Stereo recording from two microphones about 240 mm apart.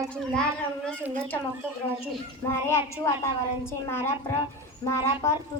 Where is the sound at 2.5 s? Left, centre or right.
Centre.